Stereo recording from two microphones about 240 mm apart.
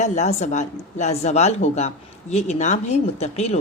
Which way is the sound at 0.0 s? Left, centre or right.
Left.